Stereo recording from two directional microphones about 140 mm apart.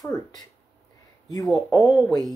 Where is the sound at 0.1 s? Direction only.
25° left (ahead or behind).